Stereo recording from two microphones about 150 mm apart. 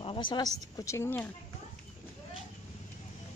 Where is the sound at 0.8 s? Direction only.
15° left (ahead or behind).